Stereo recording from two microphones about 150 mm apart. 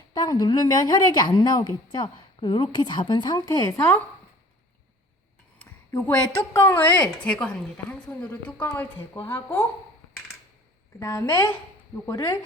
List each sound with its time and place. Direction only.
0.1 s a woman's voice: 25° left (ahead or behind)
5.5 s a sound: 10° left (ahead or behind)
6.1 s speech: 20° left (ahead or behind)
11.0 s a woman's voice: 20° left (ahead or behind)